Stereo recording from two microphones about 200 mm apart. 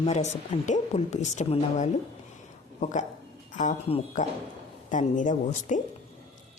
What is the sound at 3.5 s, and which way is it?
Speech, 35° left (ahead or behind).